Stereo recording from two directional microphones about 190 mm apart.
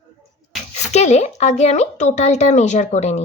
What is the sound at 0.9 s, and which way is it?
A woman's voice, 35° left (ahead or behind).